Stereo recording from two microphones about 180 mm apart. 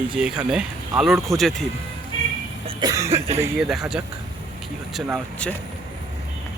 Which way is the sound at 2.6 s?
20° right (ahead or behind).